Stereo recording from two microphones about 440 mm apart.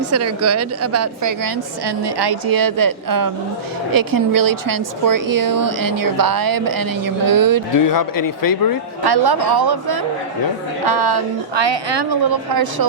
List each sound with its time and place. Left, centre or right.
0.1 s a woman's voice: right
2.0 s speech: right
7.7 s speech: left
9.0 s a woman's voice: right